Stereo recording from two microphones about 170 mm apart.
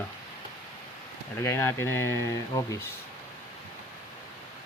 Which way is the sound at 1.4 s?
15° left (ahead or behind).